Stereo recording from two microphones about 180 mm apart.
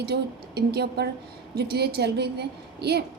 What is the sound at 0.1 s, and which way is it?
A woman's voice, 65° right (ahead or behind).